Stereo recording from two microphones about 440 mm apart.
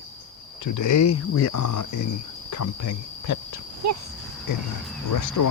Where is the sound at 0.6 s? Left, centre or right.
Left.